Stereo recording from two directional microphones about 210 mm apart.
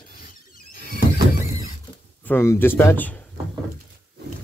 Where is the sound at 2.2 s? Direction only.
10° left (ahead or behind).